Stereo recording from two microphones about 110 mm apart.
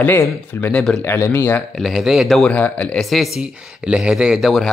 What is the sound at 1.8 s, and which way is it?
Speech, centre (ahead or behind).